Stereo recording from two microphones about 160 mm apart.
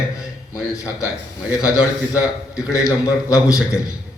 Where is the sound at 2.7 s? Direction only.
20° left (ahead or behind).